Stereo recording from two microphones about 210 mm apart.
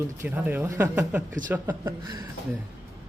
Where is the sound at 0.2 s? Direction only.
10° right (ahead or behind).